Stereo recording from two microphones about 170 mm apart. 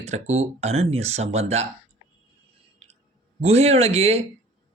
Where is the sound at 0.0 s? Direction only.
40° right (ahead or behind).